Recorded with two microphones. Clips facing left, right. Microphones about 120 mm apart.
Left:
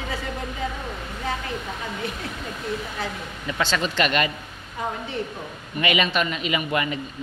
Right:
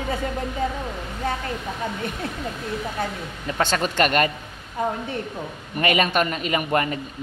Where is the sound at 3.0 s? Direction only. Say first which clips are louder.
Right 2 dB; 50° right (ahead or behind).